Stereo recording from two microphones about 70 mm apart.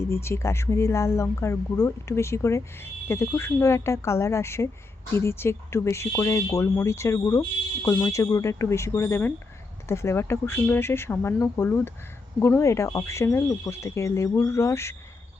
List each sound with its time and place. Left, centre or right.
0.1 s speech: left